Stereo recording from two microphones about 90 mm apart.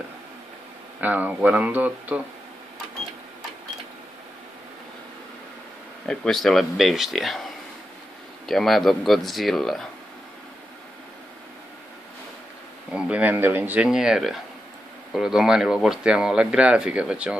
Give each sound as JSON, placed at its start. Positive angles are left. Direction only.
{"t": 1.0, "sound": "speech", "side_deg": -20}
{"t": 6.0, "sound": "speech", "side_deg": 5}
{"t": 8.5, "sound": "speech", "side_deg": 0}
{"t": 12.9, "sound": "speech", "side_deg": -10}
{"t": 13.8, "sound": "speech", "side_deg": -5}